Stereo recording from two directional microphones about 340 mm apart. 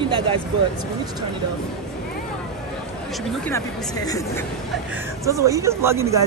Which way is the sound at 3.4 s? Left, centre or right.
Centre.